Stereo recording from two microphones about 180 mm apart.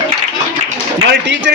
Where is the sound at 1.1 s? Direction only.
80° right.